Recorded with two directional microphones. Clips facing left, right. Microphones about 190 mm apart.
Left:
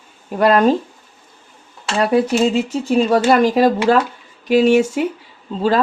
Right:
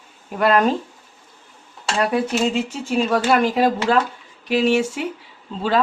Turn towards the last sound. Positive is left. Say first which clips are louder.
# left 3 dB
turn(degrees=40)  # may be behind; listen again after turning